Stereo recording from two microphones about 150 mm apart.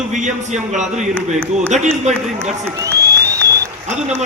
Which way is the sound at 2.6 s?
20° right (ahead or behind).